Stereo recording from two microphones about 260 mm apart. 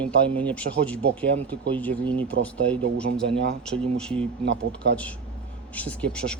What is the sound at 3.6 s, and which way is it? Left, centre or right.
Speech, centre.